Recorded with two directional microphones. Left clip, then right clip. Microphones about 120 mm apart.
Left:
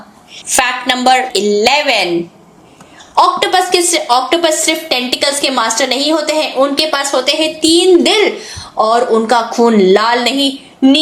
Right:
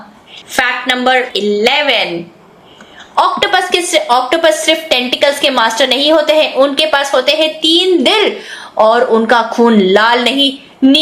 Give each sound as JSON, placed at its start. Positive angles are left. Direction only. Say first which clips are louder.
{"t": 0.5, "sound": "a woman's voice", "louder": "even", "side_deg": 60}
{"t": 3.2, "sound": "a woman's voice", "louder": "left 1 dB", "side_deg": 35}